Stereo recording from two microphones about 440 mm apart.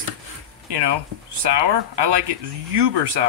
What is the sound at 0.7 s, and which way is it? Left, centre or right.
Speech, right.